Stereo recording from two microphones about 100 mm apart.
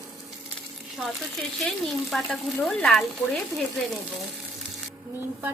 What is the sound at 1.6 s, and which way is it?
A woman's voice, 5° left (ahead or behind).